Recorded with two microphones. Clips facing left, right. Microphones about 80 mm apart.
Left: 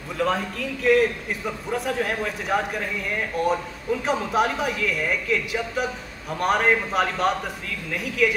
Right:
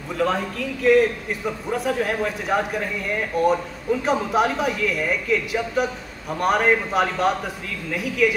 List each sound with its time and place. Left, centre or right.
0.2 s a man's voice: centre